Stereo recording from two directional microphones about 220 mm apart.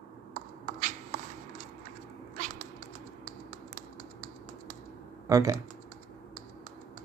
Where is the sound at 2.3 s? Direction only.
35° right (ahead or behind).